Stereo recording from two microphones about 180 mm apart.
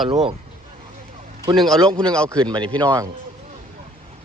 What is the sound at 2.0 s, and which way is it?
Speech, 5° left (ahead or behind).